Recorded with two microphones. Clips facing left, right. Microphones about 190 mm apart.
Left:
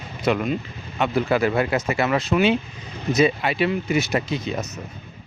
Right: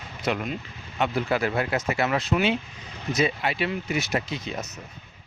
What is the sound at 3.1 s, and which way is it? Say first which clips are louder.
Speech: left 6 dB; 70° left (ahead or behind).